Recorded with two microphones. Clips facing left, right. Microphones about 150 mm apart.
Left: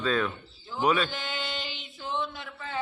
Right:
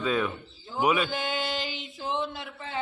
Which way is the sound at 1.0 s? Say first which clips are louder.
Right 5 dB; 45° right (ahead or behind).